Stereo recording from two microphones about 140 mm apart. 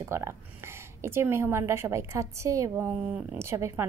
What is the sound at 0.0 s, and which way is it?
A woman's voice, 20° right (ahead or behind).